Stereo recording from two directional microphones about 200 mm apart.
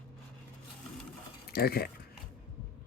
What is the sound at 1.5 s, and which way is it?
Speech, 50° left (ahead or behind).